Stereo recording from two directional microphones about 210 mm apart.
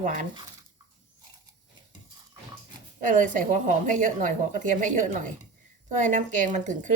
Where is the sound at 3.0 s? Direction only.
35° right (ahead or behind).